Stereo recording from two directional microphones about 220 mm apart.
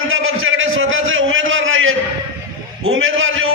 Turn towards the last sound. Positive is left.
turn(degrees=-65)  # may be behind; listen again after turning